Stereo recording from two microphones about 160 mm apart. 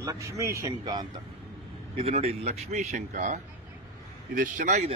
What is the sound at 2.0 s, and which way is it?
Speech, 40° right (ahead or behind).